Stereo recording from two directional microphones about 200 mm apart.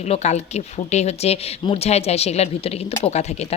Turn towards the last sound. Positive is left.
turn(degrees=30)  # may be behind; listen again after turning